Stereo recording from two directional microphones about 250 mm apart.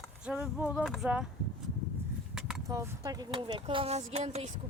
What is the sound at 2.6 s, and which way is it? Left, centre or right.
Speech, centre.